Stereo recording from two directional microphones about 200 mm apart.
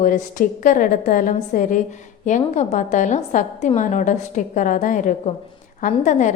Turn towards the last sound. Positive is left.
turn(degrees=35)  # may be behind; listen again after turning